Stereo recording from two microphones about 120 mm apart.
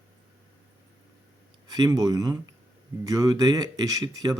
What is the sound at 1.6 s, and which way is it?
Speech, 35° right (ahead or behind).